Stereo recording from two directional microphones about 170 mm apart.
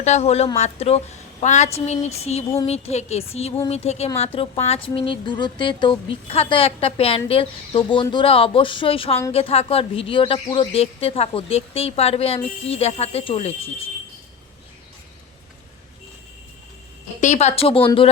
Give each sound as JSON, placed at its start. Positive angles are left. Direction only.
{"t": 0.0, "sound": "a woman's voice", "side_deg": 40}
{"t": 17.2, "sound": "a woman's voice", "side_deg": 45}